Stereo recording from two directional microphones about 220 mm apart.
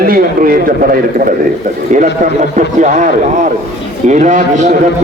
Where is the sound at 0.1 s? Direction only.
40° right (ahead or behind).